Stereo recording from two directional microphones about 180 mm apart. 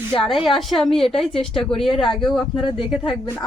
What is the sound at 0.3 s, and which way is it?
Speech, centre (ahead or behind).